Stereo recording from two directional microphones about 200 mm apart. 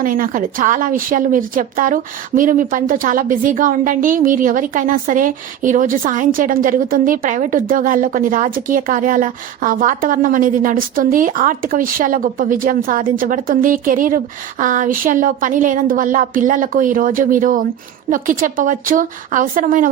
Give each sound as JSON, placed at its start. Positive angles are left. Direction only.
{"t": 0.0, "sound": "a woman's voice", "side_deg": -45}